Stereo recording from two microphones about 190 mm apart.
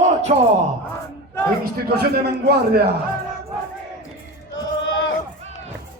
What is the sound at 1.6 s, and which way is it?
A man's voice, 55° right (ahead or behind).